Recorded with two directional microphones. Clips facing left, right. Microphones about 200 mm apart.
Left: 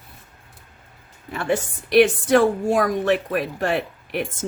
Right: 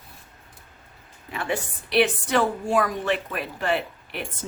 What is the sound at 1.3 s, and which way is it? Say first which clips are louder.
Speech: left 5 dB; 50° left (ahead or behind).